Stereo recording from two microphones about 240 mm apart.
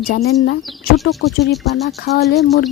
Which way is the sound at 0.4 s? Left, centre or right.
Left.